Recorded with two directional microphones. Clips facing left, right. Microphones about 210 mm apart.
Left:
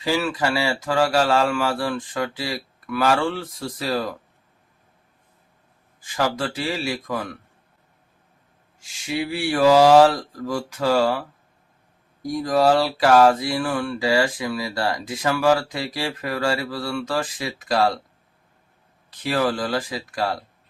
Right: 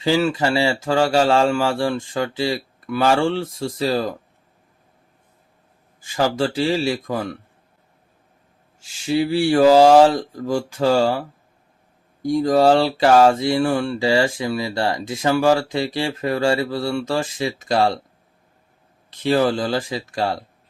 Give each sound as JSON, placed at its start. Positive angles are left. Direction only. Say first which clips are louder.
{"t": 0.0, "sound": "speech", "louder": "right 4 dB", "side_deg": -25}
{"t": 6.0, "sound": "speech", "louder": "right 4 dB", "side_deg": -30}
{"t": 8.8, "sound": "speech", "louder": "right 6 dB", "side_deg": -30}
{"t": 19.2, "sound": "speech", "louder": "right 4 dB", "side_deg": -25}